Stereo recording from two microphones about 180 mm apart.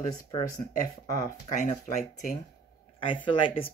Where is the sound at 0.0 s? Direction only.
35° left (ahead or behind).